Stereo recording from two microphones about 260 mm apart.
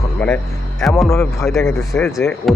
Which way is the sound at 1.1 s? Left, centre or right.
Centre.